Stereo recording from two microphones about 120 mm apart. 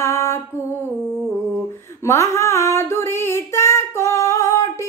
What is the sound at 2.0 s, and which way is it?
Female singing, 20° left (ahead or behind).